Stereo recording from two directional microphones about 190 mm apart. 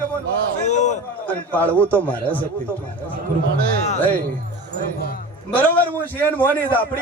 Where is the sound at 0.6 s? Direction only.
40° left (ahead or behind).